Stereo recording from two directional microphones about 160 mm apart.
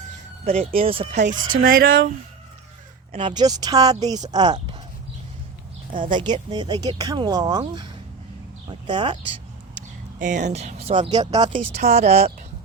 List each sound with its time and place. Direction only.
0.4 s speech: 40° right (ahead or behind)
1.2 s speech: 55° right (ahead or behind)
3.1 s speech: 30° right (ahead or behind)
6.0 s speech: 30° right (ahead or behind)
10.2 s speech: 50° right (ahead or behind); by 11.6 s 25° right (ahead or behind)
11.8 s speech: 45° right (ahead or behind)